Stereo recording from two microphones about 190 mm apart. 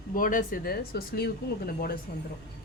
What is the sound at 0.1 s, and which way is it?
Speech, 45° left (ahead or behind).